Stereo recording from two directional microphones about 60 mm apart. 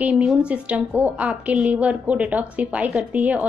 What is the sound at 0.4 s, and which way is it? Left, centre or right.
A woman's voice, right.